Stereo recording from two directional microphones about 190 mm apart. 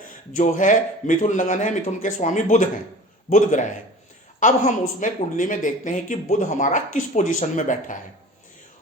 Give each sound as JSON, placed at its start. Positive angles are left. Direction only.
{"t": 0.3, "sound": "speech", "side_deg": 40}